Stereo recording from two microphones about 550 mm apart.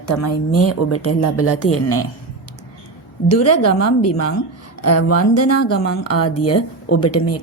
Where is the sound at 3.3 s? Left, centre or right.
Left.